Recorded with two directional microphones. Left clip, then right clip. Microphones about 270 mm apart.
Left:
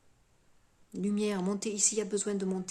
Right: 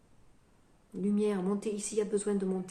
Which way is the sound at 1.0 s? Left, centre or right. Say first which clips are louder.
Right 1 dB; left.